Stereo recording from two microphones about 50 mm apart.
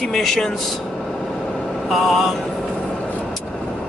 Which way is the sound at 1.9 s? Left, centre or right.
Centre.